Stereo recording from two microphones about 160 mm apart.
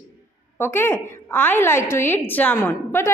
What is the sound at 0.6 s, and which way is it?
A woman's voice, 15° left (ahead or behind).